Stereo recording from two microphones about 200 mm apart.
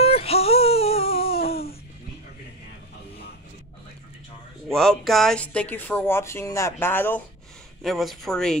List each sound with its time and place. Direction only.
0.0 s whimper: 30° left (ahead or behind)
1.5 s music: 50° left (ahead or behind)
4.6 s speech: centre (ahead or behind)